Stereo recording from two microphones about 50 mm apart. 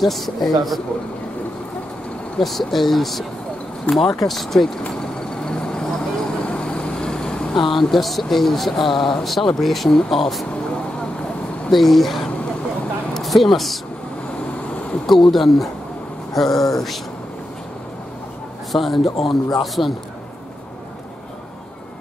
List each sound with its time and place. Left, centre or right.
0.0 s speech: centre
2.3 s speech: centre
4.8 s vehicle: centre
7.5 s speech: centre
11.7 s speech: centre
15.0 s speech: centre
18.7 s speech: centre